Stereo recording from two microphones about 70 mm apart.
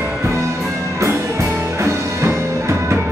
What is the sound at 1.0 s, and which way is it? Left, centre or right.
Music, right.